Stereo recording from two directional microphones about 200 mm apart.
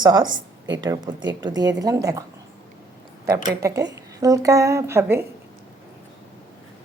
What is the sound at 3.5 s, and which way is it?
A woman's voice, 15° right (ahead or behind).